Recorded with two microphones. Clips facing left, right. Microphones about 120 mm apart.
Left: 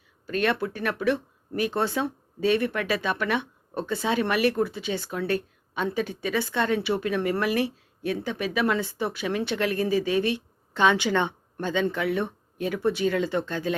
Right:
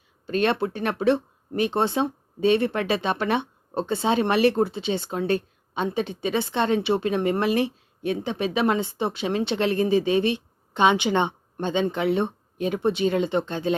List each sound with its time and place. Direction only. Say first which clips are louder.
0.3 s speech: right 3 dB; 25° right (ahead or behind)